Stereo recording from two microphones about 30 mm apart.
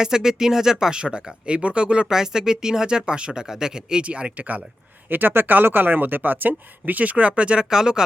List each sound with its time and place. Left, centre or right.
0.0 s speech: right
2.0 s speech: right
4.0 s speech: right
5.1 s speech: right
7.6 s speech: right